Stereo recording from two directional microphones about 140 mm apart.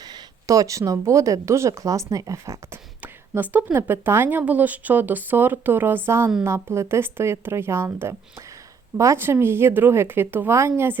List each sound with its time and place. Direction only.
0.0 s a woman's voice: 30° right (ahead or behind)